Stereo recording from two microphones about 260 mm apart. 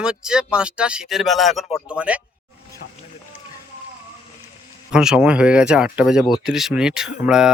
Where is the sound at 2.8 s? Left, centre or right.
Left.